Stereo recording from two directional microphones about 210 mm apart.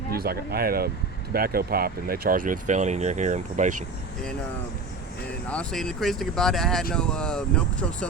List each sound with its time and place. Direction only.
0.1 s speech: 45° right (ahead or behind)
5.5 s speech: 5° left (ahead or behind)